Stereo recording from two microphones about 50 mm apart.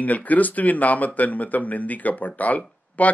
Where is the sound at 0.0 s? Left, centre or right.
Left.